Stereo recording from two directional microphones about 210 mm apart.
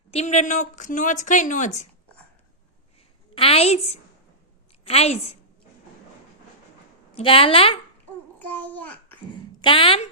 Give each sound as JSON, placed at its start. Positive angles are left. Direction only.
{"t": 0.1, "sound": "speech", "side_deg": 30}
{"t": 3.3, "sound": "a woman's voice", "side_deg": 25}
{"t": 7.2, "sound": "a woman's voice", "side_deg": 25}
{"t": 8.4, "sound": "a child's voice", "side_deg": 10}
{"t": 9.6, "sound": "a woman's voice", "side_deg": 25}